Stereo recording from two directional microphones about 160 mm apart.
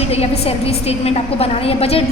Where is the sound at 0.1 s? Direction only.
40° left (ahead or behind).